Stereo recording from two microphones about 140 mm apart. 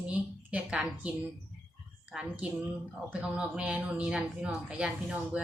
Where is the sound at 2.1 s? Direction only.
5° right (ahead or behind).